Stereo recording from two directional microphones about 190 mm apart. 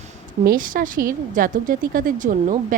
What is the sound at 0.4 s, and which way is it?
Speech, 45° right (ahead or behind).